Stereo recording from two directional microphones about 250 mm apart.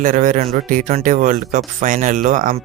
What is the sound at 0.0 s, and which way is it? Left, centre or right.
Speech, right.